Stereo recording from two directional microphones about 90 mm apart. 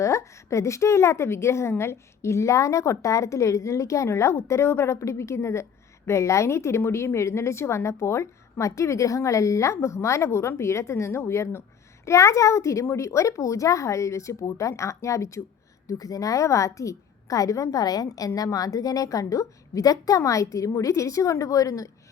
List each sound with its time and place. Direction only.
0.0 s a woman's voice: 35° left (ahead or behind)